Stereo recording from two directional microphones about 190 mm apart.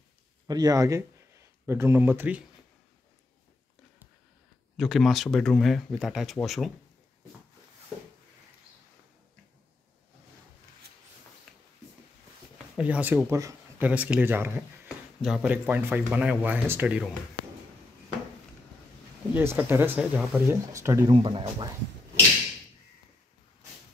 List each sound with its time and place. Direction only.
0.5 s speech: 20° right (ahead or behind)
4.7 s speech: centre (ahead or behind)
11.5 s a sound: centre (ahead or behind)
12.7 s speech: 5° right (ahead or behind)
19.3 s speech: 10° right (ahead or behind)
21.1 s speech: 30° right (ahead or behind)